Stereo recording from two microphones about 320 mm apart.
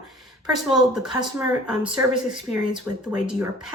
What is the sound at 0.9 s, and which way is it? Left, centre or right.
Speech, centre.